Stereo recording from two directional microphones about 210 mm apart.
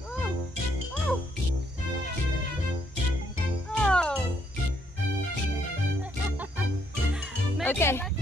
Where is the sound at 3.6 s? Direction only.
5° left (ahead or behind).